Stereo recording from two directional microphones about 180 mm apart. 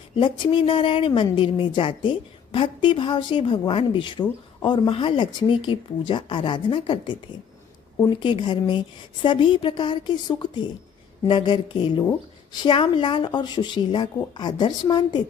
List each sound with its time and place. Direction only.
0.1 s speech: 25° left (ahead or behind)
8.2 s speech: 25° left (ahead or behind)